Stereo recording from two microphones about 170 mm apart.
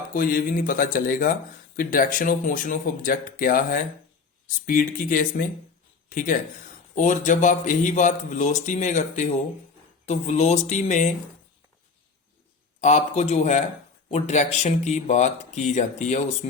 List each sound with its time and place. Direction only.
0.1 s speech: 55° left (ahead or behind)
12.8 s speech: 45° left (ahead or behind)